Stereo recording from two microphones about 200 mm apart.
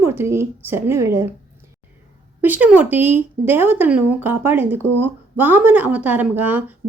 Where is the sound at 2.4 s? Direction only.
10° right (ahead or behind).